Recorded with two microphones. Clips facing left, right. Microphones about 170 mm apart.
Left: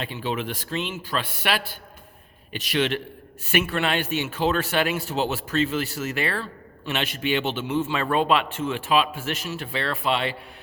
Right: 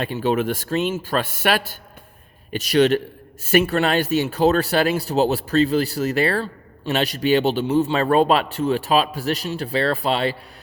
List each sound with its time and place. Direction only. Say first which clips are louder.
0.0 s a man's voice: right 8 dB; 45° right (ahead or behind)